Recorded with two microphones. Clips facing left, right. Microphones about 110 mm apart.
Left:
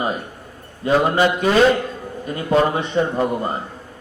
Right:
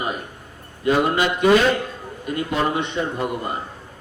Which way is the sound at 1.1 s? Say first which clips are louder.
Even; 35° left (ahead or behind).